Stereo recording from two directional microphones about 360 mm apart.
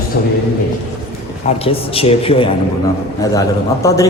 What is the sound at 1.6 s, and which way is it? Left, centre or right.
A man's voice, centre.